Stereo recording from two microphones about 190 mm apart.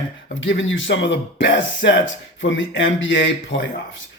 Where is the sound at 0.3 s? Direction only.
75° left (ahead or behind).